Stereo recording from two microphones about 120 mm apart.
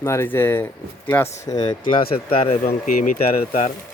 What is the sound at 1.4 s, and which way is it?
Speech, 35° left (ahead or behind).